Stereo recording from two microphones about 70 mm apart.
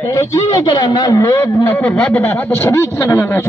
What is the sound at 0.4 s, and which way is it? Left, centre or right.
Speech, left.